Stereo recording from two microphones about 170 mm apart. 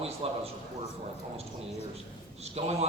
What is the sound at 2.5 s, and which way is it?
Speech, 40° right (ahead or behind).